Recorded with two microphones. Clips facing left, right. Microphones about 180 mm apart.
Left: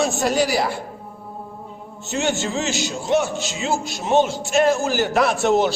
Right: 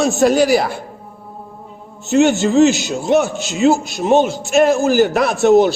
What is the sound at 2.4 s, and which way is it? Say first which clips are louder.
A man's voice: right 12 dB; 60° right (ahead or behind).